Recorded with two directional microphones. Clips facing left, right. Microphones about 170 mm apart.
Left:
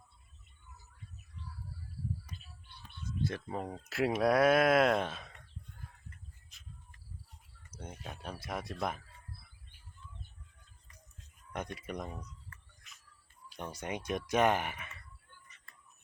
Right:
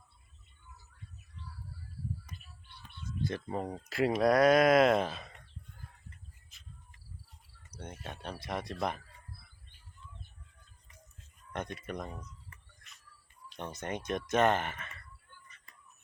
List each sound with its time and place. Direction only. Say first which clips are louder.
3.2 s speech: right 3 dB; centre (ahead or behind)
6.5 s insect: even; centre (ahead or behind)
7.7 s speech: right 2 dB; 5° left (ahead or behind)
11.8 s speech: right 1 dB; 10° left (ahead or behind)
13.5 s speech: right 1 dB; 10° left (ahead or behind)